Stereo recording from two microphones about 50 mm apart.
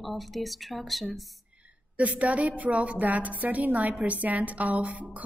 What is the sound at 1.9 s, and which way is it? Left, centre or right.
A woman's voice, right.